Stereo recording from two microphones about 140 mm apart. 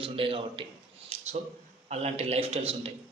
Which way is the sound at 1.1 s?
45° right (ahead or behind).